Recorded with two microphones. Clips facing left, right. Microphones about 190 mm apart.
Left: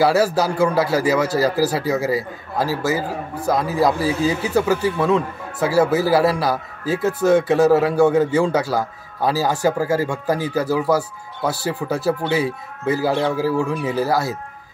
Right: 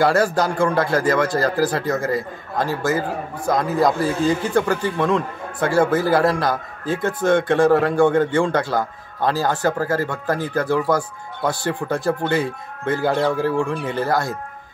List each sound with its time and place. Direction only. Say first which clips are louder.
0.0 s a man's voice: left 1 dB; 5° left (ahead or behind)